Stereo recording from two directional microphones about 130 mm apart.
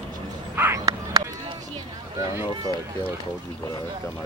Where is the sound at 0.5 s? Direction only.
20° right (ahead or behind).